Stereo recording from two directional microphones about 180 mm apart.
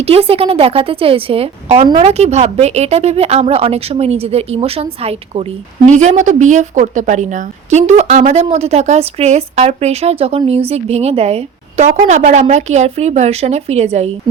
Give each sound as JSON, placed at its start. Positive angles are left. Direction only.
{"t": 0.0, "sound": "a woman's voice", "side_deg": -35}